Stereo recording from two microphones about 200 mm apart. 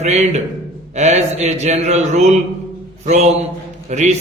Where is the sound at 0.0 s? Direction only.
35° right (ahead or behind).